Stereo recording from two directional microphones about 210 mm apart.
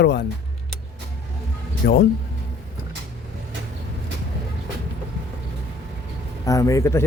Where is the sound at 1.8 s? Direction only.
45° left (ahead or behind).